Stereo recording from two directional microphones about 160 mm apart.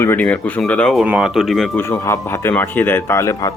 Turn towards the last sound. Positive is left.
turn(degrees=20)  # may be behind; listen again after turning